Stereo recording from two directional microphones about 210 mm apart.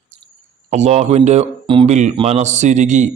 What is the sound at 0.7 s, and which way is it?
A man's voice, 30° right (ahead or behind).